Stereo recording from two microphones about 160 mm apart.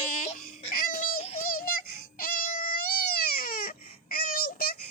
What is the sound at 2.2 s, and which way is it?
Crying, 65° left (ahead or behind).